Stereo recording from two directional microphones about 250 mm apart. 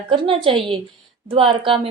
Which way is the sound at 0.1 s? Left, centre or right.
Right.